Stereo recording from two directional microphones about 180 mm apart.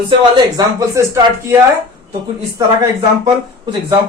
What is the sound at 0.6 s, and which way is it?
Speech, 20° right (ahead or behind).